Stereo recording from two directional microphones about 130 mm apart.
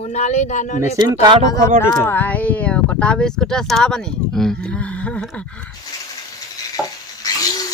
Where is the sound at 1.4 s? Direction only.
25° left (ahead or behind).